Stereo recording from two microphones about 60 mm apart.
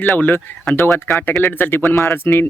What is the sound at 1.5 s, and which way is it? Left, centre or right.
Speech, left.